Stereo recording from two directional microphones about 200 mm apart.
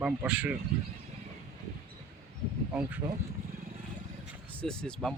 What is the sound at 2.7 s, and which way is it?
Speech, 10° right (ahead or behind).